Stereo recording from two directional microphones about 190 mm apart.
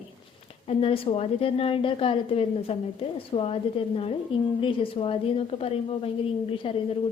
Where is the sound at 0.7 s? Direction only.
30° left (ahead or behind).